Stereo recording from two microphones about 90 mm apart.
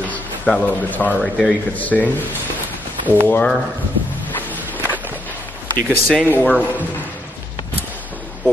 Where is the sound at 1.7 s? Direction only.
15° left (ahead or behind).